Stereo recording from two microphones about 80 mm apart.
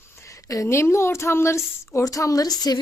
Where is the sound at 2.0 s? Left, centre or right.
Left.